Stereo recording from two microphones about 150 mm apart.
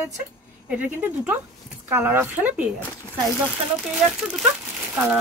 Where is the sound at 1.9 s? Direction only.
15° right (ahead or behind).